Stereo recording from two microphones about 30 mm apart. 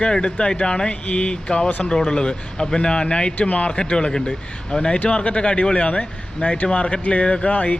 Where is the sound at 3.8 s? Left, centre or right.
Left.